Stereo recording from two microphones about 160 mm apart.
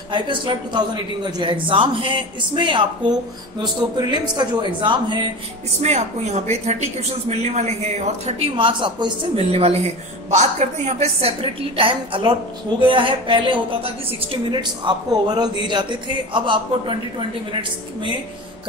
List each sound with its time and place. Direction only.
0.1 s a man's voice: 30° right (ahead or behind)
5.8 s a man's voice: 45° right (ahead or behind)